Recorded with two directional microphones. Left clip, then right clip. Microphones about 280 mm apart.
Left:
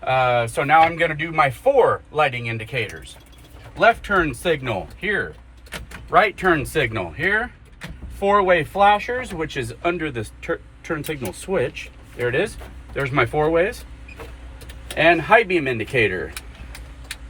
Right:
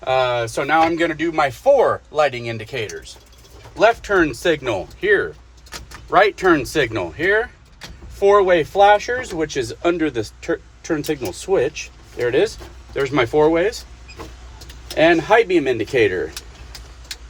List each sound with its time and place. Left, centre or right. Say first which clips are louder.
0.0 s speech: even; right
14.9 s speech: right 1 dB; right